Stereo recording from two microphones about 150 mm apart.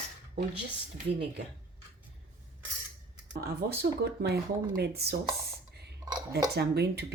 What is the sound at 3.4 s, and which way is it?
Speech, 90° right.